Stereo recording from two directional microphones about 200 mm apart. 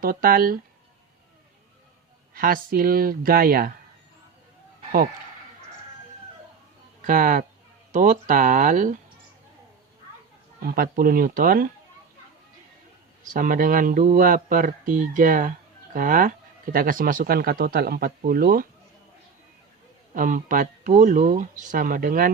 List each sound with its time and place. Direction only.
0.0 s speech: 45° right (ahead or behind)
2.3 s speech: 45° right (ahead or behind)
7.0 s speech: 40° right (ahead or behind)
10.6 s speech: 45° right (ahead or behind)
13.3 s speech: 40° right (ahead or behind)
20.1 s speech: 40° right (ahead or behind)